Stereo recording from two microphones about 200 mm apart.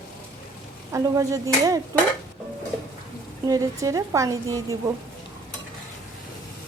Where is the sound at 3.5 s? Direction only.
15° right (ahead or behind).